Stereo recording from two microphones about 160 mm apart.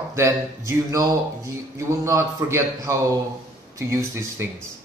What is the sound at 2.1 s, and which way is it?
Speech, 15° right (ahead or behind).